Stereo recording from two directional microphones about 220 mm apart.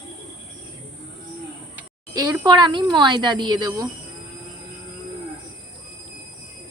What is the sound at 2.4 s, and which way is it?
Speech, 20° right (ahead or behind).